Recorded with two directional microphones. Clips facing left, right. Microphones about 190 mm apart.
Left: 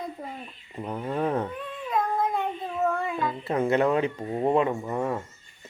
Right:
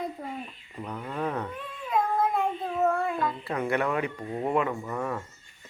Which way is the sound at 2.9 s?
Centre (ahead or behind).